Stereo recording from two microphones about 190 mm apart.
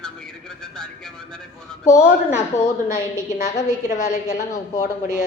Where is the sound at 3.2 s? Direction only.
45° left (ahead or behind).